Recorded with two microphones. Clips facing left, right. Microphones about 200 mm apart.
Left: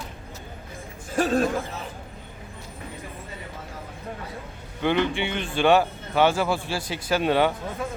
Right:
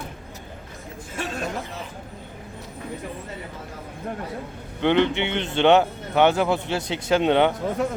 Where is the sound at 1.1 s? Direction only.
35° left (ahead or behind).